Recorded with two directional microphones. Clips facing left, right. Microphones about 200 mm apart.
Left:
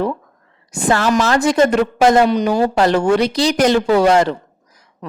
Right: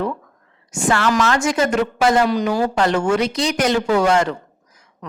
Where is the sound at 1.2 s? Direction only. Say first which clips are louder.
Left 4 dB; 35° left (ahead or behind).